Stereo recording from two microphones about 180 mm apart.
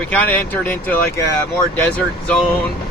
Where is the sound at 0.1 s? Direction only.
10° left (ahead or behind).